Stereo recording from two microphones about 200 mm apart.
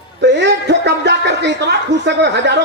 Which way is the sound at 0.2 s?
60° right (ahead or behind).